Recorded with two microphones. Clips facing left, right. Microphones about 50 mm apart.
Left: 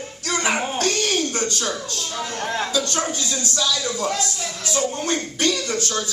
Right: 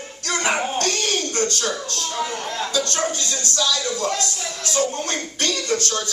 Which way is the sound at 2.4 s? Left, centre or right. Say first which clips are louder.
Left 2 dB; left.